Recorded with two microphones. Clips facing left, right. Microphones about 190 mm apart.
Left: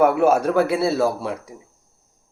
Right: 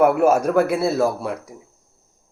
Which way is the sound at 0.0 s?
5° right (ahead or behind).